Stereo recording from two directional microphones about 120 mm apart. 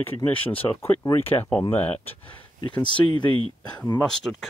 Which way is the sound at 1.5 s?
15° left (ahead or behind).